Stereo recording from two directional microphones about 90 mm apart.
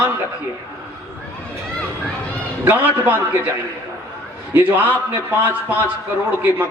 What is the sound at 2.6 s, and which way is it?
Speech, 20° right (ahead or behind).